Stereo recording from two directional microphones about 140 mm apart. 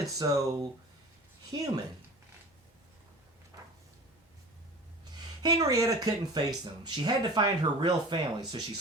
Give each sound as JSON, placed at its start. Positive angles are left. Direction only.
{"t": 0.2, "sound": "speech", "side_deg": -25}
{"t": 5.4, "sound": "speech", "side_deg": -25}